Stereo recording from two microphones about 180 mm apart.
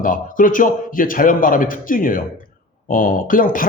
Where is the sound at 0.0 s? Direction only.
50° left (ahead or behind).